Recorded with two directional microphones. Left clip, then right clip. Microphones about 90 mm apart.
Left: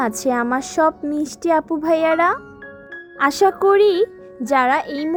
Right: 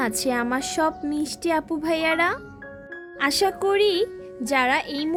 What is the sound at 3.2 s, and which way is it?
Speech, 40° left (ahead or behind).